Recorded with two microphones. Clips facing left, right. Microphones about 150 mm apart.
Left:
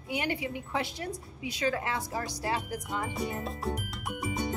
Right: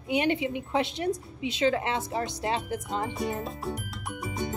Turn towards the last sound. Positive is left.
turn(degrees=0)  # may be behind; listen again after turning